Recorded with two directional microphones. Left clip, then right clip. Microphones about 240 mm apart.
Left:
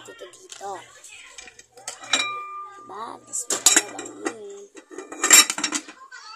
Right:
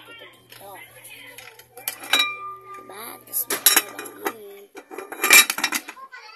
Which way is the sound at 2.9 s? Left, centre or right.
Centre.